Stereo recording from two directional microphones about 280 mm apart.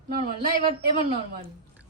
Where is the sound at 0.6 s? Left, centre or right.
Centre.